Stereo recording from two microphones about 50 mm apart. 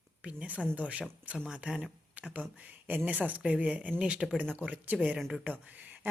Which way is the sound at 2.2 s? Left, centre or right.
Right.